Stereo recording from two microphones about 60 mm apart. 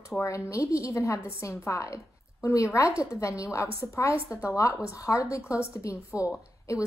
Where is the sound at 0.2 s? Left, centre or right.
Left.